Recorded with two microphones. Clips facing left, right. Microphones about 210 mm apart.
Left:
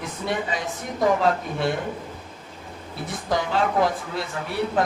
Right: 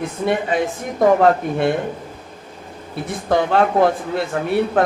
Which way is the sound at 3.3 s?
60° right (ahead or behind).